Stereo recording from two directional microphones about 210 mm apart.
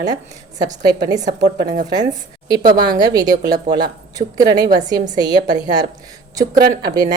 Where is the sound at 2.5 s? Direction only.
20° right (ahead or behind).